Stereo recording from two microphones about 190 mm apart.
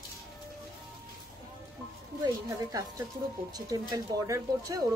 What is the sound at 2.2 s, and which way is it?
A woman's voice, 20° right (ahead or behind).